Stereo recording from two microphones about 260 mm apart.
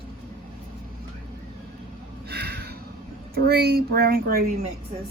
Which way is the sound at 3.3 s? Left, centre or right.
Right.